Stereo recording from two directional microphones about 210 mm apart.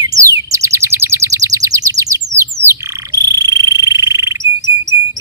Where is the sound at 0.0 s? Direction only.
15° right (ahead or behind).